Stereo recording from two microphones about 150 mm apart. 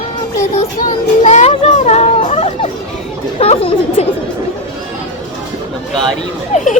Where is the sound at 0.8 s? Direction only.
55° left (ahead or behind).